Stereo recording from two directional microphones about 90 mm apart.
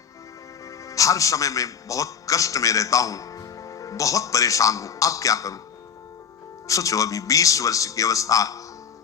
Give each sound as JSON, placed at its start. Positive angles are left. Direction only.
{"t": 0.9, "sound": "a man's voice", "side_deg": 40}
{"t": 6.7, "sound": "a man's voice", "side_deg": 40}